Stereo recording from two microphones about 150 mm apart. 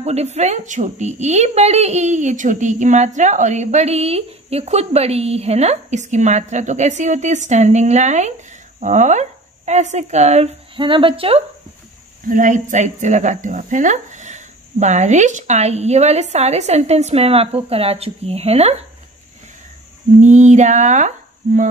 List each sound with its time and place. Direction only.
0.0 s a woman's voice: 45° right (ahead or behind)
12.3 s a woman's voice: 60° right (ahead or behind); by 18.8 s 45° right (ahead or behind)
20.2 s a woman's voice: 55° right (ahead or behind)